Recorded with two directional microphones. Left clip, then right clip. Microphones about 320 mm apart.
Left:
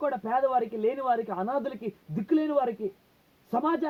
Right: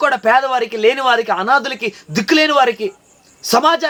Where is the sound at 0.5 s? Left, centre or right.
Centre.